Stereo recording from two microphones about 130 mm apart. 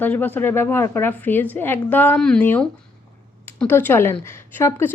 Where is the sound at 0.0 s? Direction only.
15° left (ahead or behind).